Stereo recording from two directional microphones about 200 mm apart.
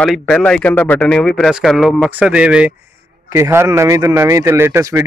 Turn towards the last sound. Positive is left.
turn(degrees=-10)  # may be behind; listen again after turning